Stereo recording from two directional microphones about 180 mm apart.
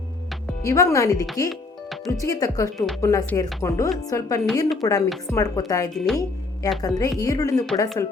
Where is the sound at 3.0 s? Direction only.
20° left (ahead or behind).